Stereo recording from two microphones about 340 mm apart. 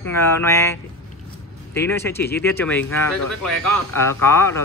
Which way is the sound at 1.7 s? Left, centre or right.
Centre.